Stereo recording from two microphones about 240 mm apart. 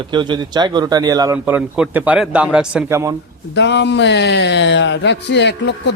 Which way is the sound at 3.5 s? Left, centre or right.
Left.